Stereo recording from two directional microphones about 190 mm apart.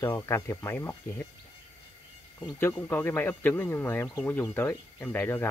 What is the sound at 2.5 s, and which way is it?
Speech, 10° left (ahead or behind).